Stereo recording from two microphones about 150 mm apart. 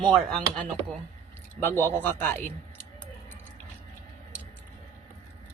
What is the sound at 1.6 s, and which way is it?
Speech, 15° left (ahead or behind).